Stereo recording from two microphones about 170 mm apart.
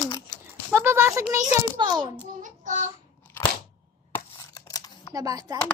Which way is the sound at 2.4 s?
45° right (ahead or behind).